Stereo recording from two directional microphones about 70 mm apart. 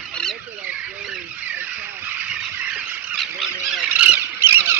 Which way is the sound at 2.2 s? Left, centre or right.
Centre.